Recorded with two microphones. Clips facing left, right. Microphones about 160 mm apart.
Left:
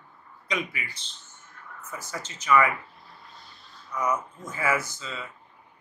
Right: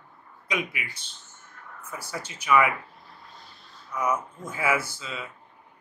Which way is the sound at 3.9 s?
10° right (ahead or behind).